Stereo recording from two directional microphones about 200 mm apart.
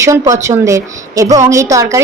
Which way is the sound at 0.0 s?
15° right (ahead or behind).